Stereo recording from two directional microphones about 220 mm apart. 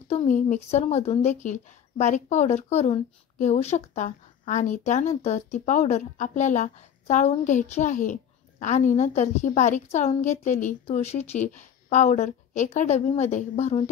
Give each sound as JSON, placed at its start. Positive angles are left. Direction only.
{"t": 0.1, "sound": "speech", "side_deg": 30}